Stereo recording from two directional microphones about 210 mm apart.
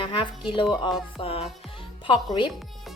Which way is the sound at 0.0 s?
25° left (ahead or behind).